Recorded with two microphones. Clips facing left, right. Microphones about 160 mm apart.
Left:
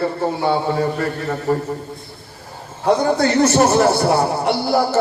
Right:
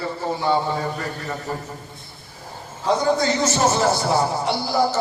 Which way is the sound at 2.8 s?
60° left (ahead or behind).